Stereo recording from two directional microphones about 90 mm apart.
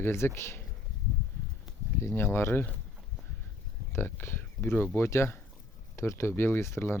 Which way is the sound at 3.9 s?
25° left (ahead or behind).